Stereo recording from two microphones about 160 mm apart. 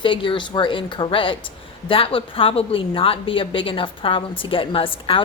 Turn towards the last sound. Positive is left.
turn(degrees=35)  # may be behind; listen again after turning